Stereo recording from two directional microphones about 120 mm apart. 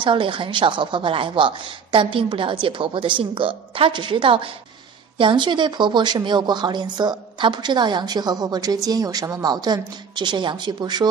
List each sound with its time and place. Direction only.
0.0 s a woman's voice: 45° right (ahead or behind)